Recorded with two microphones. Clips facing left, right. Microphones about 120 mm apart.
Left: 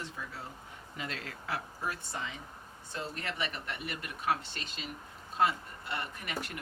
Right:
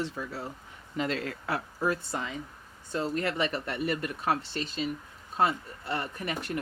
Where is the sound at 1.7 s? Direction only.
90° right.